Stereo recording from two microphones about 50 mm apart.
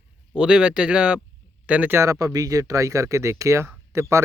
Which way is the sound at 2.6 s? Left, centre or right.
Right.